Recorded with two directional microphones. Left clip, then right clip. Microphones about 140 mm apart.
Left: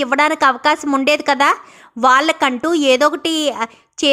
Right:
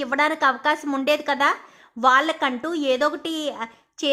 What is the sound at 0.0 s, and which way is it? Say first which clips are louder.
A woman's voice: left 6 dB; 30° left (ahead or behind).